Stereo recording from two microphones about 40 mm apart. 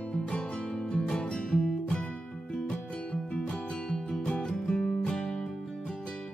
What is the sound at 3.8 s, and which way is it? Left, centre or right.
Music, centre.